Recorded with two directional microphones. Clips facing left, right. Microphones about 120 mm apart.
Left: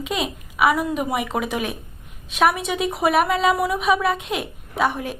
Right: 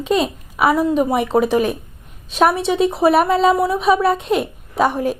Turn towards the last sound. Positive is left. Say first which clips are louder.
# right 5 dB
turn(degrees=-40)  # may be behind; listen again after turning